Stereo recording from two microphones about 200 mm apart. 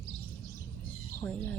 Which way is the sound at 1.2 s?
10° left (ahead or behind).